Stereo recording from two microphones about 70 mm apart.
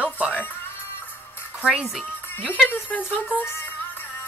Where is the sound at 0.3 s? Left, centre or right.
Left.